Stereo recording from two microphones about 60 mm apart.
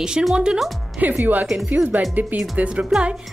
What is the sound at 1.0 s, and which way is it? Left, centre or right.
A woman's voice, right.